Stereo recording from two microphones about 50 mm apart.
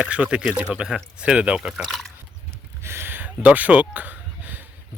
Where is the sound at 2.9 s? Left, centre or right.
Right.